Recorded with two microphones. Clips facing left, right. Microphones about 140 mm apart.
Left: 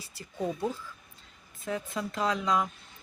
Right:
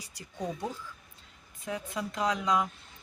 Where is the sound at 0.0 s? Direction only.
15° right (ahead or behind).